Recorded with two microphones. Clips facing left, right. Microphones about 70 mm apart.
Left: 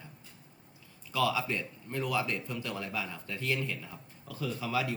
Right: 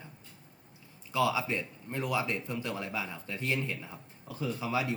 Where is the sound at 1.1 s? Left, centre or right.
Centre.